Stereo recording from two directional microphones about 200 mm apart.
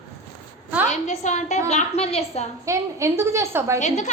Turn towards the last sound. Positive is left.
turn(degrees=35)  # may be behind; listen again after turning